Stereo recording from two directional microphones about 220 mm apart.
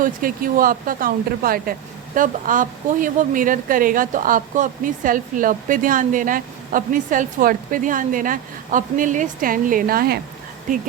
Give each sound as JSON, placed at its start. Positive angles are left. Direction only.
{"t": 0.0, "sound": "speech", "side_deg": -40}